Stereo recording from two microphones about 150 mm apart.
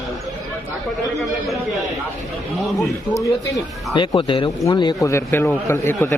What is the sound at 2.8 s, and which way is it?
Speech, 20° left (ahead or behind).